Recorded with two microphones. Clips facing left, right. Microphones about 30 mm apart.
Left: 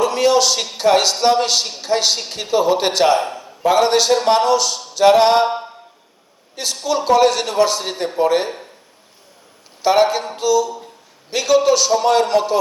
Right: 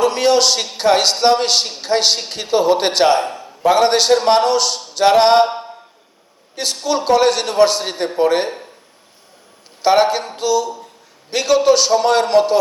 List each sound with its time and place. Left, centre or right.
0.0 s a man's voice: right
6.6 s a man's voice: right
9.8 s a man's voice: right